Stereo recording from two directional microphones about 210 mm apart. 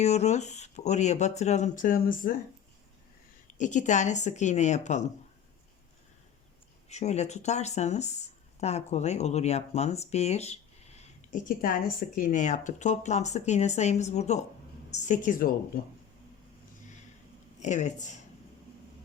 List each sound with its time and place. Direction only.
0.0 s speech: 30° left (ahead or behind)
3.4 s speech: 35° left (ahead or behind)
6.8 s speech: 30° left (ahead or behind)
17.6 s speech: 35° left (ahead or behind)